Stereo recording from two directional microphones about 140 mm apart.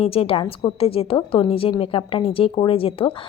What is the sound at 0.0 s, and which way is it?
A woman's voice, 45° left (ahead or behind).